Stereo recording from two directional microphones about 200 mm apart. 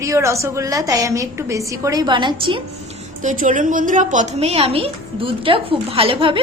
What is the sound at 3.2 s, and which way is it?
A woman's voice, 40° right (ahead or behind).